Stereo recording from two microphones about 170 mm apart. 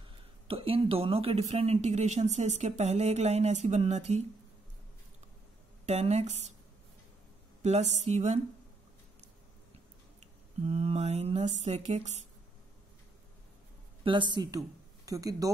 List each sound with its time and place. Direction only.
0.5 s speech: 35° right (ahead or behind)
5.9 s speech: 40° right (ahead or behind)
7.6 s speech: 40° right (ahead or behind)
10.2 s speech: 35° right (ahead or behind)
14.0 s speech: 30° right (ahead or behind)